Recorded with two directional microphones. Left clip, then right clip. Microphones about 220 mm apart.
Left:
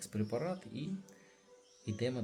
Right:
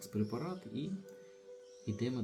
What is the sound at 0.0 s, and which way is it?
Speech, 35° left (ahead or behind).